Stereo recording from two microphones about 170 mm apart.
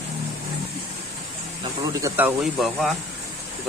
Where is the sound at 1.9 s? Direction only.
20° right (ahead or behind).